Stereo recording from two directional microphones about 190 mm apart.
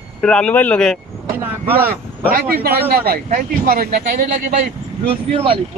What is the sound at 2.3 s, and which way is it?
Speech, 55° right (ahead or behind).